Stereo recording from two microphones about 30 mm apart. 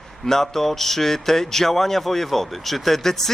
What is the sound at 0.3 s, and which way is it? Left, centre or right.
Speech, centre.